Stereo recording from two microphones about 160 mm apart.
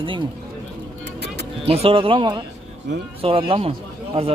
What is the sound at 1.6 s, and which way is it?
Speech, 35° right (ahead or behind).